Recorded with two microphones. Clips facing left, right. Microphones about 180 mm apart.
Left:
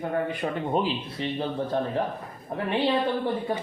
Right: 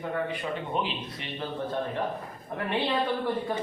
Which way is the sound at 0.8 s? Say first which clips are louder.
Left 7 dB; 35° left (ahead or behind).